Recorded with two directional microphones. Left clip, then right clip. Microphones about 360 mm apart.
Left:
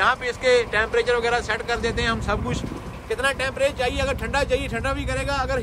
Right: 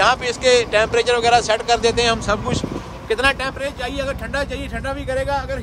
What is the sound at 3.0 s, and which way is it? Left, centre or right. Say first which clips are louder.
Speech: right 6 dB; right.